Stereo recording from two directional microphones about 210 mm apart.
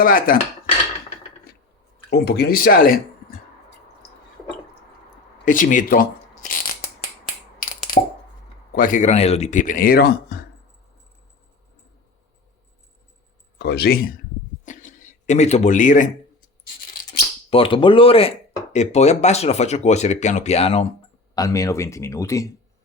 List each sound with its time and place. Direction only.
0.0 s speech: 45° left (ahead or behind)
2.0 s speech: 50° left (ahead or behind)
5.5 s shuffling cards: 40° left (ahead or behind)
7.6 s a sound: 40° left (ahead or behind)
8.7 s speech: 40° left (ahead or behind)
13.6 s speech: 50° left (ahead or behind)
14.6 s a sound: 35° left (ahead or behind)
17.5 s speech: 25° left (ahead or behind)
21.3 s speech: 15° left (ahead or behind)